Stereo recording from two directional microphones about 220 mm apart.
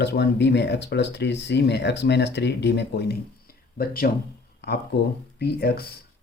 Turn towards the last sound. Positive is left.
turn(degrees=45)  # may be behind; listen again after turning